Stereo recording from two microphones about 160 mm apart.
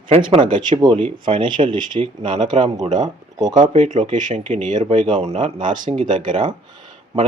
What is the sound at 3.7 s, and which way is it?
Speech, 50° right (ahead or behind).